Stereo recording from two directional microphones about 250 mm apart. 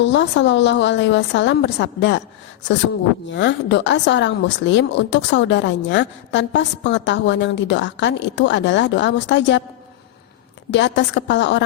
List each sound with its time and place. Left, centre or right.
0.0 s a woman's voice: left
3.2 s a woman's voice: left
10.7 s a woman's voice: left